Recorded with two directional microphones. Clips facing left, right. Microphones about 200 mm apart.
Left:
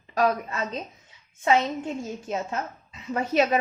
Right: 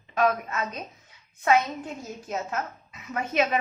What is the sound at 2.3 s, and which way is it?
A woman's voice, 30° left (ahead or behind).